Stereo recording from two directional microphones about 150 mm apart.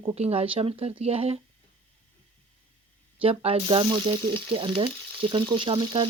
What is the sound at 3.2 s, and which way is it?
Speech, 40° right (ahead or behind).